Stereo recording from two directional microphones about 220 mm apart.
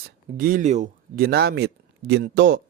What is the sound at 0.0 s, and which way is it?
Speech, 40° right (ahead or behind).